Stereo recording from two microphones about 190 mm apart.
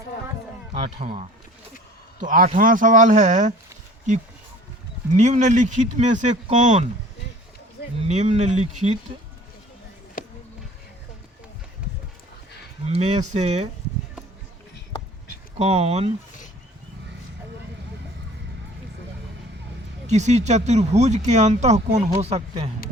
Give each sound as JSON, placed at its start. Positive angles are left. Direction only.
{"t": 1.0, "sound": "speech", "side_deg": -35}
{"t": 2.2, "sound": "speech", "side_deg": -45}
{"t": 5.1, "sound": "speech", "side_deg": -40}
{"t": 8.0, "sound": "speech", "side_deg": -40}
{"t": 10.2, "sound": "music", "side_deg": 45}
{"t": 12.9, "sound": "speech", "side_deg": -35}
{"t": 15.5, "sound": "speech", "side_deg": -35}
{"t": 20.1, "sound": "speech", "side_deg": -35}